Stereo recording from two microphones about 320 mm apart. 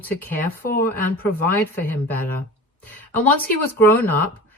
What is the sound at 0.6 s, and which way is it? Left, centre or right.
Speech, left.